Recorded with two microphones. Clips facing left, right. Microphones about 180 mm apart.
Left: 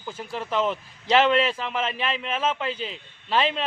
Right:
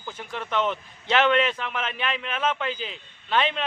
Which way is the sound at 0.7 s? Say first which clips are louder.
Left 3 dB; 30° left (ahead or behind).